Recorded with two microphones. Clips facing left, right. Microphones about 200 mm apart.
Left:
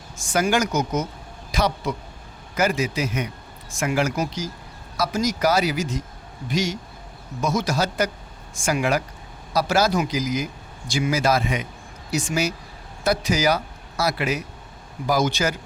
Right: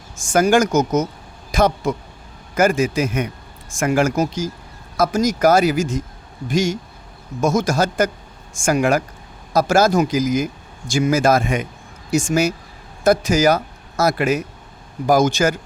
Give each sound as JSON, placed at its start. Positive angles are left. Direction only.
{"t": 0.2, "sound": "speech", "side_deg": -45}